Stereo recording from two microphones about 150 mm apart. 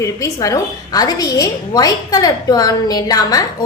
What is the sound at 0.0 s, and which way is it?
A woman's voice, 20° left (ahead or behind).